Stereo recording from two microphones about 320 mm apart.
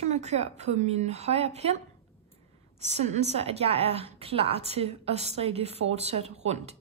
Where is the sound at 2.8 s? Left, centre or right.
Right.